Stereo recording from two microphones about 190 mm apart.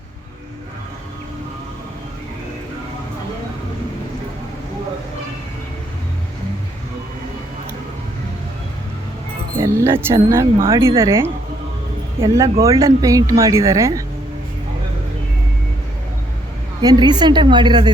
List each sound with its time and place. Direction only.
9.6 s speech: 15° right (ahead or behind)
16.8 s a woman's voice: 20° right (ahead or behind)